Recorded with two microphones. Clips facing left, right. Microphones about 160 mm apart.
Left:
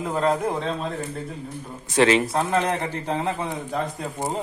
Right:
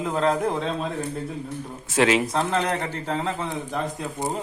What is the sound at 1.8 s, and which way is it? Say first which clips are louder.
Speech: left 2 dB; 5° right (ahead or behind).